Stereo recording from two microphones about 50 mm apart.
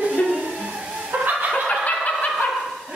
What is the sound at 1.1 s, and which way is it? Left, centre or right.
Fowl, right.